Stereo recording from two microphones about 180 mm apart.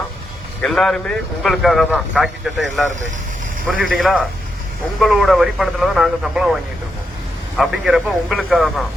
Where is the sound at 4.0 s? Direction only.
Centre (ahead or behind).